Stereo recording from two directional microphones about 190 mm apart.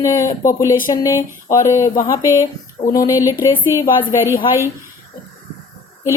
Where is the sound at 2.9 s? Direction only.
20° left (ahead or behind).